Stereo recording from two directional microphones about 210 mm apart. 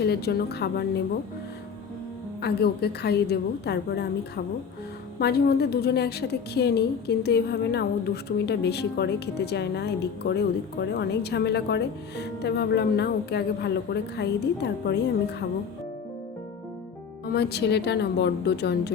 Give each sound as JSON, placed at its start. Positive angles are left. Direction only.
{"t": 0.0, "sound": "a woman's voice", "side_deg": 50}
{"t": 2.4, "sound": "a woman's voice", "side_deg": 50}
{"t": 5.2, "sound": "a woman's voice", "side_deg": 50}
{"t": 17.3, "sound": "a woman's voice", "side_deg": 55}